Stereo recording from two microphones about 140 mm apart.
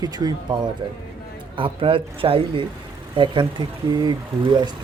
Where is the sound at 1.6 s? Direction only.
40° right (ahead or behind).